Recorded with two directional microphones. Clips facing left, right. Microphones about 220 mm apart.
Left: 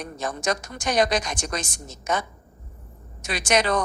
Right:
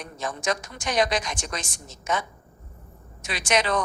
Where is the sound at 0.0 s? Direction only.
40° left (ahead or behind).